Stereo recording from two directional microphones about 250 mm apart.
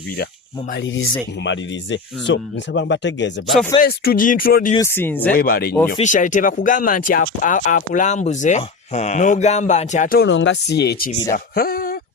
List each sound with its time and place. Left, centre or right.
0.7 s speech: left
4.8 s speech: centre
5.3 s speech: left